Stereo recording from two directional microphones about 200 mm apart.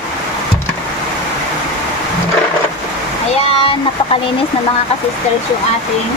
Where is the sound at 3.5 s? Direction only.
25° left (ahead or behind).